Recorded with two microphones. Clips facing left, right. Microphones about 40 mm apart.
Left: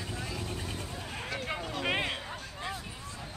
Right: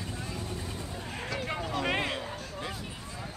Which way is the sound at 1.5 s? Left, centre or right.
Centre.